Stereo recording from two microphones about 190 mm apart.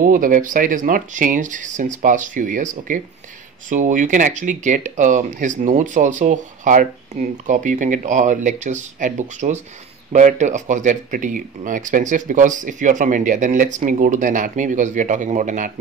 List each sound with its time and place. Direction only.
0.0 s speech: 45° right (ahead or behind)